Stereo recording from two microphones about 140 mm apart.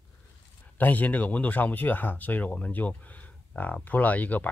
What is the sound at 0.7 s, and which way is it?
Speech, 10° left (ahead or behind).